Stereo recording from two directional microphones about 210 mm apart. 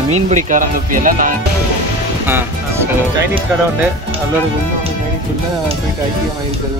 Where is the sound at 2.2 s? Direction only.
10° right (ahead or behind).